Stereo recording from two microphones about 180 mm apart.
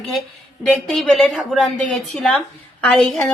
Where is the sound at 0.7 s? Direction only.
Centre (ahead or behind).